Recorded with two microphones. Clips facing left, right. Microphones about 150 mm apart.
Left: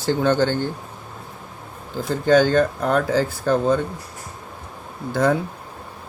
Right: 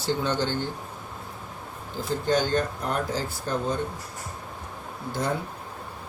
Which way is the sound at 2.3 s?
90° left.